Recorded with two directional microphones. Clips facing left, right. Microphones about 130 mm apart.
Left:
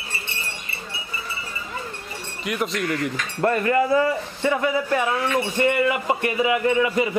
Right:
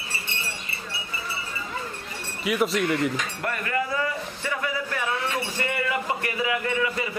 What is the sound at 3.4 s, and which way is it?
Speech, 30° left (ahead or behind).